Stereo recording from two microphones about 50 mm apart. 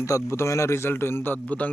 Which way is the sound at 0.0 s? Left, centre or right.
Left.